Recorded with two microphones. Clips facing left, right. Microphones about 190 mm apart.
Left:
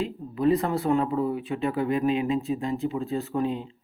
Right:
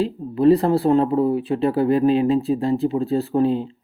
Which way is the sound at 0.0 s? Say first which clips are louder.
Right 7 dB; 35° right (ahead or behind).